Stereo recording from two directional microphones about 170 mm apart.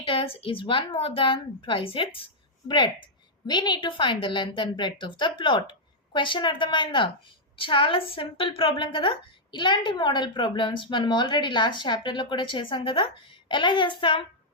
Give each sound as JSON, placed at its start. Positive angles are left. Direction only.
{"t": 0.0, "sound": "a woman's voice", "side_deg": 30}